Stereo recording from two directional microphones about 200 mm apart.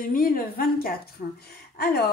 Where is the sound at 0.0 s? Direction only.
45° left (ahead or behind).